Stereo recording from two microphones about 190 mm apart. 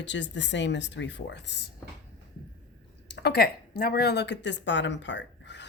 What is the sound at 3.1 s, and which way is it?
Speech, 60° left (ahead or behind).